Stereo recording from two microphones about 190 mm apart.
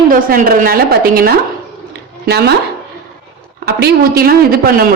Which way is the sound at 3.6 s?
55° right (ahead or behind).